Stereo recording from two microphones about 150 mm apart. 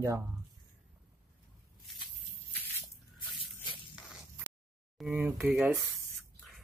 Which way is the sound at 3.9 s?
5° right (ahead or behind).